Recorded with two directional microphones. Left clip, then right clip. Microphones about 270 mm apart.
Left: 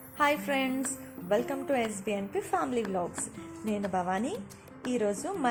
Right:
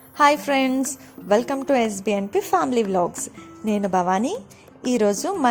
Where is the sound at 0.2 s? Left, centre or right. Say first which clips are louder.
Right 10 dB; right.